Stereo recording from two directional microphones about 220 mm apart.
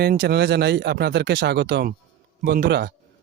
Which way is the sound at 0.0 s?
45° right (ahead or behind).